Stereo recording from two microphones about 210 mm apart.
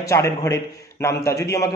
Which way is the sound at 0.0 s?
15° left (ahead or behind).